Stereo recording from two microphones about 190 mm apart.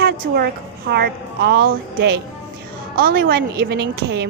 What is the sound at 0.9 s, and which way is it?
Speech, 60° right (ahead or behind).